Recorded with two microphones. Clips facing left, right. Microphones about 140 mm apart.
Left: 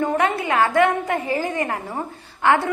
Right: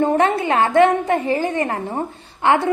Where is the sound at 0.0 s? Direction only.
30° right (ahead or behind).